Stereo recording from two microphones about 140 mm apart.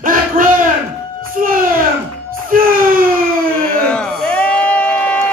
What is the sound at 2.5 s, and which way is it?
Wail, 80° right.